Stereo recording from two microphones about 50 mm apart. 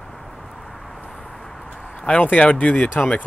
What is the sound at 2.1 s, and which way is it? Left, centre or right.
Speech, left.